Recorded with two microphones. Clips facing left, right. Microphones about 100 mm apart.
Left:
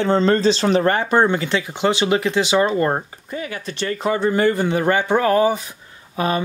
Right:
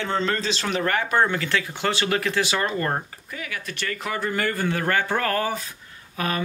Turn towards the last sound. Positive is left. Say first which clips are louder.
# left 6 dB
turn(degrees=25)  # may be behind; listen again after turning